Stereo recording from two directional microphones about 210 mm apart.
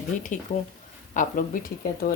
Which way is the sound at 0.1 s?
35° left (ahead or behind).